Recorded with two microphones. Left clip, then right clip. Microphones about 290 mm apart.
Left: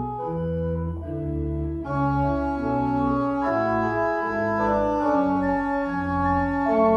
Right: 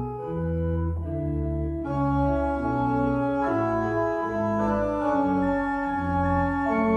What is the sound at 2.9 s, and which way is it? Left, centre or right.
Organ, centre.